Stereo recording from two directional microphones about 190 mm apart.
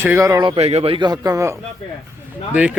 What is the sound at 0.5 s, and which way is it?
Speech, 30° right (ahead or behind).